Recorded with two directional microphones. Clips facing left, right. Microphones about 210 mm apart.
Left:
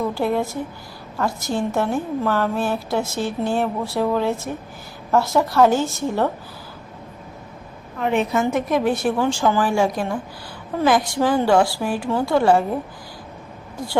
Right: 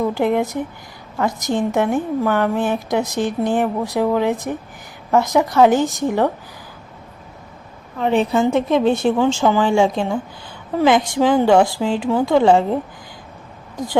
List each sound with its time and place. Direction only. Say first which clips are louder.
0.1 s a woman's voice: right 3 dB; 20° right (ahead or behind)
8.0 s a woman's voice: right 3 dB; 30° right (ahead or behind)